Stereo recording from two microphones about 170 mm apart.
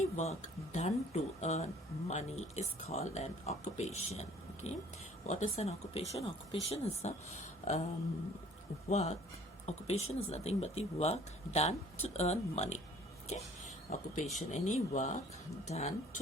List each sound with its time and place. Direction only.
0.2 s speech: 40° left (ahead or behind)
8.9 s speech: 40° left (ahead or behind)